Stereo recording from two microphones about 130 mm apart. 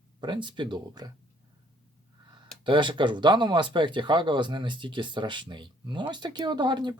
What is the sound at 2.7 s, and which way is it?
Speech, 40° right (ahead or behind).